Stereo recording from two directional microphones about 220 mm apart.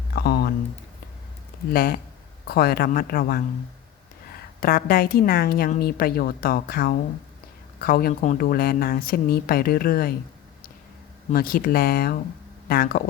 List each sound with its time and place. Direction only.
0.1 s a sound: 45° left (ahead or behind)
1.7 s a woman's voice: 40° left (ahead or behind)
4.6 s a woman's voice: 40° left (ahead or behind)
11.3 s speech: 40° left (ahead or behind)